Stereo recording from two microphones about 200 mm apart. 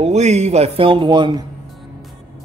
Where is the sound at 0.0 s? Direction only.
35° right (ahead or behind).